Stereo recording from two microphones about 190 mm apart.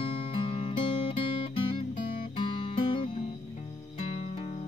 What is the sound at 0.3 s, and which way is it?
Music, 30° left (ahead or behind).